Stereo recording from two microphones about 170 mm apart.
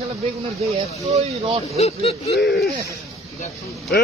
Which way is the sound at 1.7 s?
40° left (ahead or behind).